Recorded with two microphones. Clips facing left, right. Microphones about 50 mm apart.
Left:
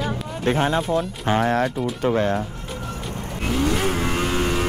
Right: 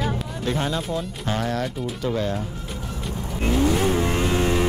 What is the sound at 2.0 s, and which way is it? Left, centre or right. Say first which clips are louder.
Speech: left 5 dB; left.